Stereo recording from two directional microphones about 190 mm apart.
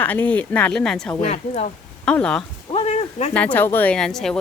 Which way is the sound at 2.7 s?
30° left (ahead or behind).